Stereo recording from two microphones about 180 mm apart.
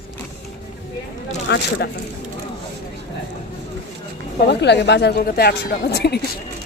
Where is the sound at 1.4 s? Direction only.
75° left (ahead or behind).